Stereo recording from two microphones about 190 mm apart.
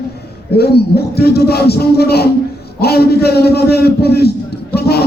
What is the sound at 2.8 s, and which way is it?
A man's voice, 55° left (ahead or behind).